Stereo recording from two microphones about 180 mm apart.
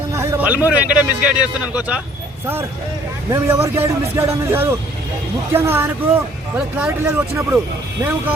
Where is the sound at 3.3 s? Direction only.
15° right (ahead or behind).